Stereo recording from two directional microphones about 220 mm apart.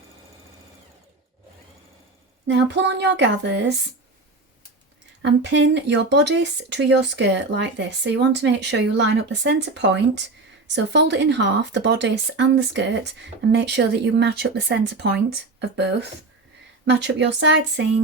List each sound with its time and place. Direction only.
2.5 s speech: 55° right (ahead or behind)
5.2 s speech: 50° right (ahead or behind)